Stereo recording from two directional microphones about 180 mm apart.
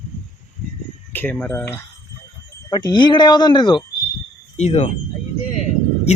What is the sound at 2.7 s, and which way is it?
Speech, 25° left (ahead or behind).